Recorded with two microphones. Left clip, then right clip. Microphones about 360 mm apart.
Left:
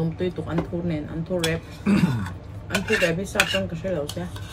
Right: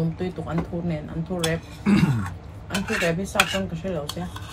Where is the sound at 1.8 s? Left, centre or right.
Right.